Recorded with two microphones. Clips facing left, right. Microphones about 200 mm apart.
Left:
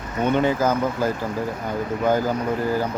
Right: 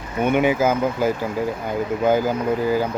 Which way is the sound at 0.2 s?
10° right (ahead or behind).